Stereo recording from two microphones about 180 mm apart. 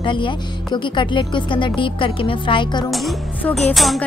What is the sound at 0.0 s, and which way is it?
A woman's voice, 25° left (ahead or behind).